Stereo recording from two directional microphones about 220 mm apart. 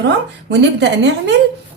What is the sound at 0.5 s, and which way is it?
Speech, 50° right (ahead or behind).